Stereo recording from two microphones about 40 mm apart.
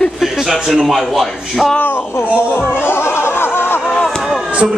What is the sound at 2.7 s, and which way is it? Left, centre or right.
Music, left.